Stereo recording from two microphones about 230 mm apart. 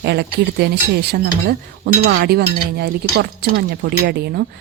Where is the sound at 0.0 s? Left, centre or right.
Right.